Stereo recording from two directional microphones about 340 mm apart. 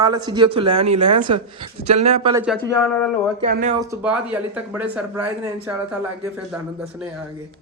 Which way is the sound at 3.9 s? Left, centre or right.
Centre.